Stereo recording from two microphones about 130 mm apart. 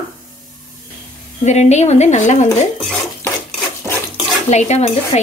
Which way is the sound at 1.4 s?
65° left (ahead or behind).